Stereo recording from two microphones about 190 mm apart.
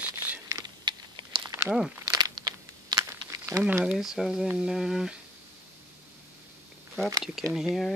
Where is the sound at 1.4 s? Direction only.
15° right (ahead or behind).